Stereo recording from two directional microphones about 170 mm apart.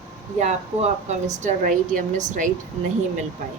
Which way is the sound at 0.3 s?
40° right (ahead or behind).